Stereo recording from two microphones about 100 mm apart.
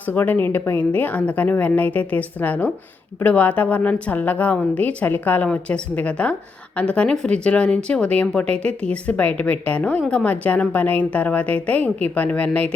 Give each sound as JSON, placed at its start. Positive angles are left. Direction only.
{"t": 0.1, "sound": "speech", "side_deg": 15}